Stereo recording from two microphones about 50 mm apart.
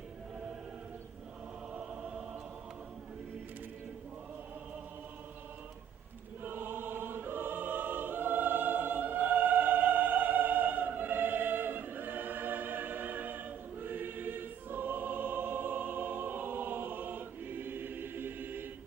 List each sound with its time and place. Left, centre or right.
6.4 s choir: right